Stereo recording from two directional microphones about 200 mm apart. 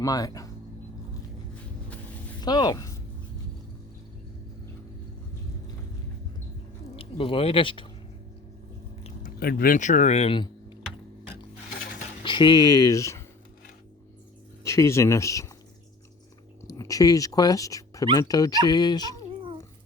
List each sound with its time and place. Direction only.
0.0 s speech: 20° left (ahead or behind)
2.4 s speech: 20° left (ahead or behind)
6.9 s speech: 25° left (ahead or behind)
9.4 s speech: 50° left (ahead or behind); by 10.8 s 25° left (ahead or behind)
12.2 s speech: 25° left (ahead or behind)
14.6 s speech: 15° left (ahead or behind)
16.6 s speech: 15° left (ahead or behind)